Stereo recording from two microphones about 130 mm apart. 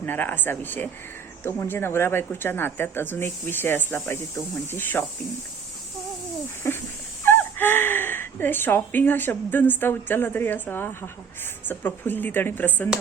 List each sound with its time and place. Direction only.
0.0 s speech: 15° left (ahead or behind)
6.6 s dog: 20° left (ahead or behind)
7.3 s speech: 15° left (ahead or behind)